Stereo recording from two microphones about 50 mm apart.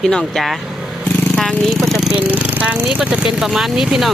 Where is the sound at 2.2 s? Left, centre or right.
Right.